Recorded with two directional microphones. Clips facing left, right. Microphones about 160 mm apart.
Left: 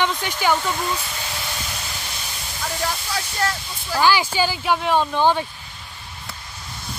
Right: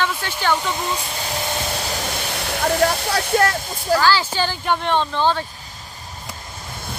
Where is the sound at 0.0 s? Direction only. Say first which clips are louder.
Left 1 dB; 15° left (ahead or behind).